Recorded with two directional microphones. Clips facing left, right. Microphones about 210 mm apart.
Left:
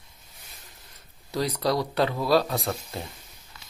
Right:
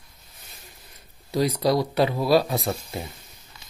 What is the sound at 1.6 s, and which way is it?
Speech, 10° right (ahead or behind).